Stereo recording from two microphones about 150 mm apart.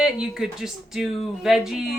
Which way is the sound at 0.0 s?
5° right (ahead or behind).